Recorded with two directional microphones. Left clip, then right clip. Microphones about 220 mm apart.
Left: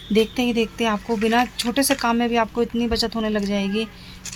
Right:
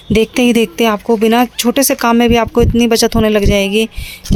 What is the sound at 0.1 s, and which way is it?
Speech, 50° right (ahead or behind).